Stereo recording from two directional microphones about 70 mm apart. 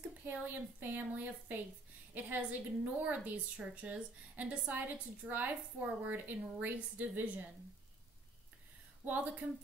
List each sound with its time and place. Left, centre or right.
0.2 s a woman's voice: right
9.0 s speech: right